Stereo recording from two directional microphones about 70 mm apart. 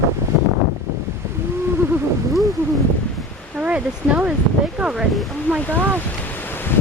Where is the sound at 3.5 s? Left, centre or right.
Centre.